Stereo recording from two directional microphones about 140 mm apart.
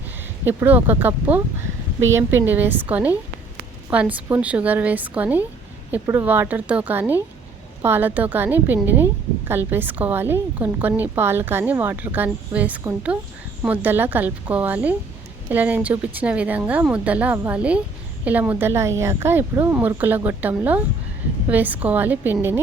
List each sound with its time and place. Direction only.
0.4 s a woman's voice: 15° right (ahead or behind)